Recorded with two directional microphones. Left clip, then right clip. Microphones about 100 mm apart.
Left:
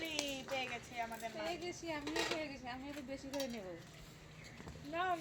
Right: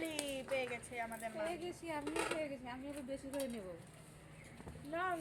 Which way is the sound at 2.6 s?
45° right (ahead or behind).